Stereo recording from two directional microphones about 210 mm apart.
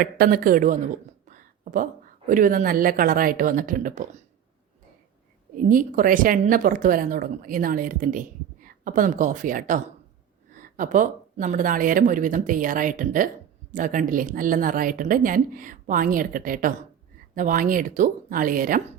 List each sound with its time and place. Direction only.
0.0 s a woman's voice: 45° right (ahead or behind)
5.5 s a woman's voice: 40° right (ahead or behind)